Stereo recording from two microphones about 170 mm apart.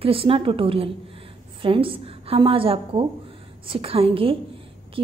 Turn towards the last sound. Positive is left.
turn(degrees=-30)  # may be behind; listen again after turning